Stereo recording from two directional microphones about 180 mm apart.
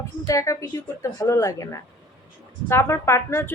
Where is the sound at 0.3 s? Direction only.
15° left (ahead or behind).